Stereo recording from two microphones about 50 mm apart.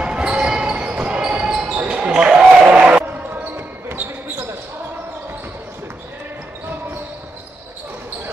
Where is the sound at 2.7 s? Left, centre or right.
Right.